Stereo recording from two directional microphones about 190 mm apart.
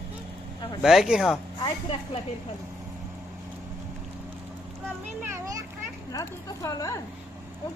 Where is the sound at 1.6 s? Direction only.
30° left (ahead or behind).